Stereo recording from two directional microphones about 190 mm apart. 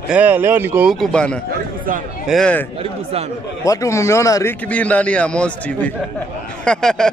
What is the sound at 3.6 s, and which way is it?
A man's voice, 15° left (ahead or behind).